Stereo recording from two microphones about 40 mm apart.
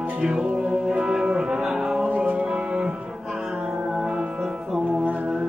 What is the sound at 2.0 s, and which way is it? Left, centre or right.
Music, right.